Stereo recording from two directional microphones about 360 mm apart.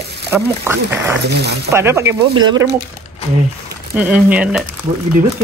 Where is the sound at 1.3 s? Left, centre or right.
Right.